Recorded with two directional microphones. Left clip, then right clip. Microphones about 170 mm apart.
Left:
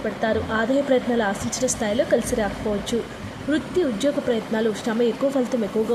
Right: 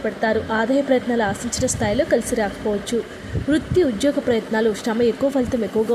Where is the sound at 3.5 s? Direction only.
15° right (ahead or behind).